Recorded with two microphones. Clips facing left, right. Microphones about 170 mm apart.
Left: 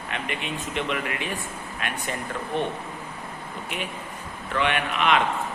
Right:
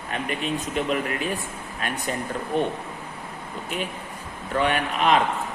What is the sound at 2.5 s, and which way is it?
Speech, 40° right (ahead or behind).